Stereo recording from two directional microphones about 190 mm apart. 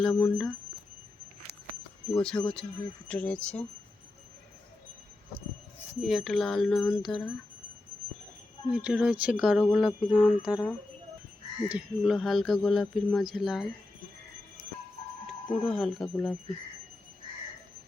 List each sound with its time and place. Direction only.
0.0 s speech: 5° left (ahead or behind)
2.1 s speech: 5° left (ahead or behind)
6.0 s speech: centre (ahead or behind)
8.7 s speech: 5° right (ahead or behind)
10.4 s speech: 20° left (ahead or behind)
11.7 s speech: centre (ahead or behind)
15.4 s speech: centre (ahead or behind)